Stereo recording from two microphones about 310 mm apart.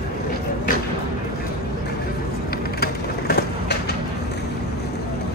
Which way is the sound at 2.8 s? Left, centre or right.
Left.